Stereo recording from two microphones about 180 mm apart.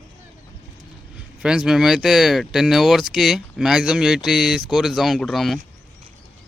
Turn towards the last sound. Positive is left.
turn(degrees=0)  # may be behind; listen again after turning